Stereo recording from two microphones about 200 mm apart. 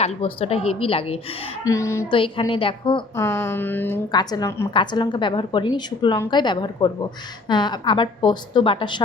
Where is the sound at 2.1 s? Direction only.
25° left (ahead or behind).